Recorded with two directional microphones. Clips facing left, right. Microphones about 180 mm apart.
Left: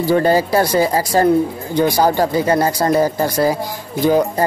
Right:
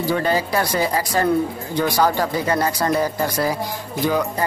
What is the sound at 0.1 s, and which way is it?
Speech, 35° left (ahead or behind).